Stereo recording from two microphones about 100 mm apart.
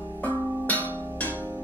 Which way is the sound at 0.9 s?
20° right (ahead or behind).